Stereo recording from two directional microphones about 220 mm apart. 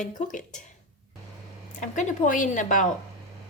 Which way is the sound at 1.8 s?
35° left (ahead or behind).